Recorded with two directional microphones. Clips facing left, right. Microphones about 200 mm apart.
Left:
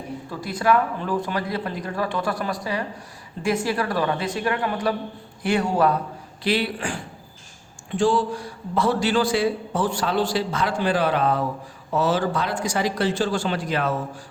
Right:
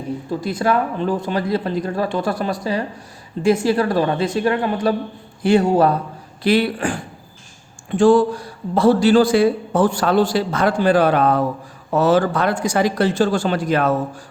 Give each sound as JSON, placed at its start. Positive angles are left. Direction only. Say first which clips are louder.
{"t": 0.3, "sound": "speech", "louder": "right 2 dB", "side_deg": -25}
{"t": 6.4, "sound": "a man's voice", "louder": "right 7 dB", "side_deg": -50}
{"t": 8.7, "sound": "a man's voice", "louder": "right 8 dB", "side_deg": -30}